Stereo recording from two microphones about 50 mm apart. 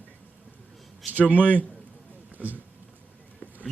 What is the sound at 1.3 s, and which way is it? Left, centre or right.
Speech, right.